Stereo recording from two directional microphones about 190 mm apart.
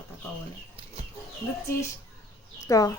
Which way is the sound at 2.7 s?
20° left (ahead or behind).